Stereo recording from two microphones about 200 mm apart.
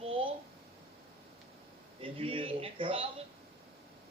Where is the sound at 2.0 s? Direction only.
25° right (ahead or behind).